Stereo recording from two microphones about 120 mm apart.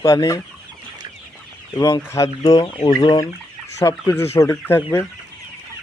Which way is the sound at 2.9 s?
40° left (ahead or behind).